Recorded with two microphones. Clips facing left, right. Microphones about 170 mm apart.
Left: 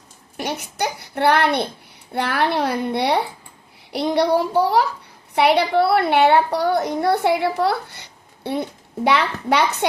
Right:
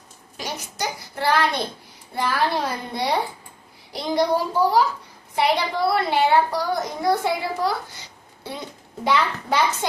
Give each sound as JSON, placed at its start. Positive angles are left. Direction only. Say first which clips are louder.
{"t": 0.3, "sound": "a child's voice", "louder": "left 5 dB", "side_deg": 60}